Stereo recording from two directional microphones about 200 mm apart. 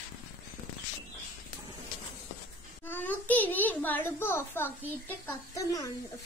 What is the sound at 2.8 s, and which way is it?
A child's voice, 10° left (ahead or behind).